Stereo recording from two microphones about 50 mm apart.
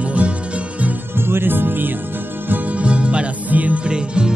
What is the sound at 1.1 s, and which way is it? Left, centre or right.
Music, right.